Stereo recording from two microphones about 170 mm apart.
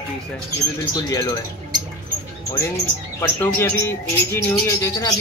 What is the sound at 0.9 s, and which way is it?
Speech, 25° left (ahead or behind).